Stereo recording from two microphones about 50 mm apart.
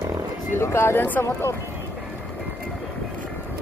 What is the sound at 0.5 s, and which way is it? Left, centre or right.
Speech, left.